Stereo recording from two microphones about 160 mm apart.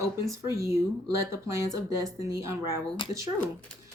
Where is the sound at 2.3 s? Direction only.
15° right (ahead or behind).